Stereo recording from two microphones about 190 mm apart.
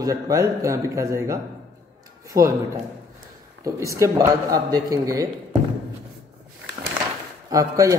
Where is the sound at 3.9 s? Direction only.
15° right (ahead or behind).